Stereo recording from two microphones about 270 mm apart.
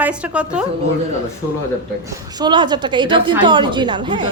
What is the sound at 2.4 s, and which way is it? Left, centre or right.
A woman's voice, centre.